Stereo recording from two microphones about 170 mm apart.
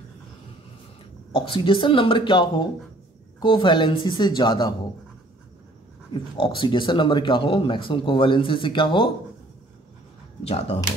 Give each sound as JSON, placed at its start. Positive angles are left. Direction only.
{"t": 1.3, "sound": "speech", "side_deg": 30}
{"t": 6.3, "sound": "speech", "side_deg": 30}
{"t": 10.4, "sound": "speech", "side_deg": 40}